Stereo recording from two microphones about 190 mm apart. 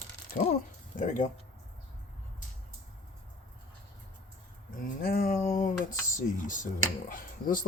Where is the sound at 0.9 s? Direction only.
45° left (ahead or behind).